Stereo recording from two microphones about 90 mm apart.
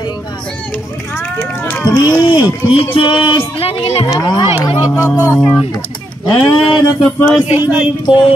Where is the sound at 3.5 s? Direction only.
90° left.